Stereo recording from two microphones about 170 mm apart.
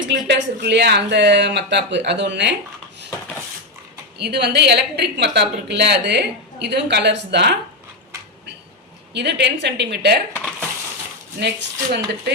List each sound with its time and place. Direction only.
0.1 s speech: 85° right
4.2 s a woman's voice: 80° right
9.1 s speech: 90° right
11.3 s speech: 75° right (ahead or behind)